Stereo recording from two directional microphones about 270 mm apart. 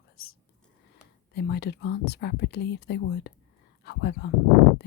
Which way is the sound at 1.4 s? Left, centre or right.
Left.